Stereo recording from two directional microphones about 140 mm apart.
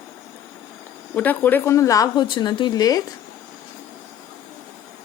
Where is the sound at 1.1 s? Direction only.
10° left (ahead or behind); by 3.0 s 25° left (ahead or behind).